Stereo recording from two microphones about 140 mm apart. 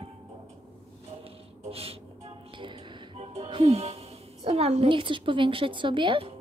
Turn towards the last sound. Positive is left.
turn(degrees=-35)  # may be behind; listen again after turning